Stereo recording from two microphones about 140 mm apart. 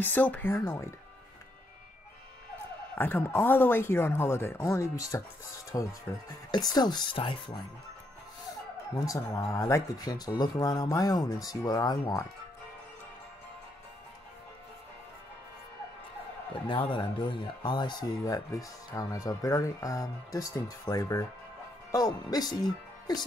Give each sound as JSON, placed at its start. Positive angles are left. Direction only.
{"t": 0.0, "sound": "speech", "side_deg": 10}
{"t": 3.0, "sound": "speech", "side_deg": 15}
{"t": 8.9, "sound": "speech", "side_deg": 25}
{"t": 16.6, "sound": "speech", "side_deg": 35}